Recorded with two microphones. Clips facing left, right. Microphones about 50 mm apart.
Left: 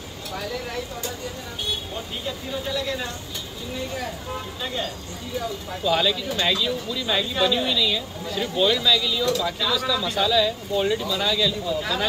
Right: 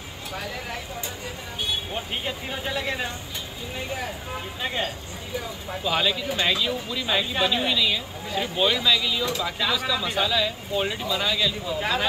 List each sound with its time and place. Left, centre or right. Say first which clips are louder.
2.0 s speech: right 1 dB; right
5.7 s a woman's voice: left 2 dB; centre